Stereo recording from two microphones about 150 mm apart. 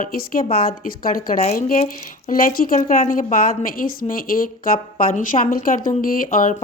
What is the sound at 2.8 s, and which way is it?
Speech, 55° left (ahead or behind).